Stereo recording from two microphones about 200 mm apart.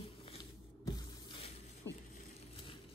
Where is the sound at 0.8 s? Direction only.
20° left (ahead or behind).